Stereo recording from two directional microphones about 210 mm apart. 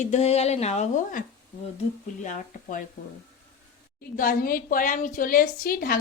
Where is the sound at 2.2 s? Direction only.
40° left (ahead or behind).